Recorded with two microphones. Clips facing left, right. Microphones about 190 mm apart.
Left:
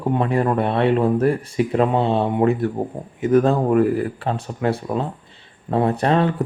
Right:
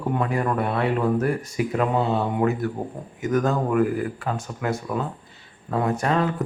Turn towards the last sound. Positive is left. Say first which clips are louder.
# left 4 dB
turn(degrees=30)  # may be behind; listen again after turning